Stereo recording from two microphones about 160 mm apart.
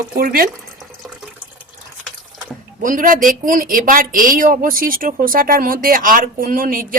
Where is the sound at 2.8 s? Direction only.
55° right (ahead or behind).